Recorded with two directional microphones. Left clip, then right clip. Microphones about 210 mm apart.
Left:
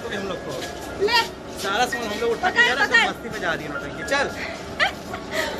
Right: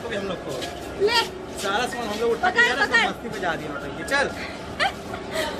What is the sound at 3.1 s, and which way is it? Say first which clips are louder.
Speech: left 1 dB; 15° right (ahead or behind).